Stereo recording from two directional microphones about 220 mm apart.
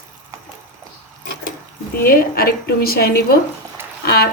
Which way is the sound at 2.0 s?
45° left (ahead or behind).